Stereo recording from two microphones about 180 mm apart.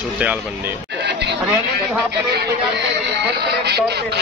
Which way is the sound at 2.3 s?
70° right (ahead or behind).